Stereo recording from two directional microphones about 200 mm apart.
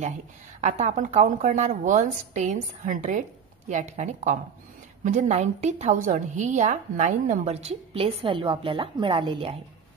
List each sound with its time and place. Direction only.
0.6 s a woman's voice: 35° right (ahead or behind)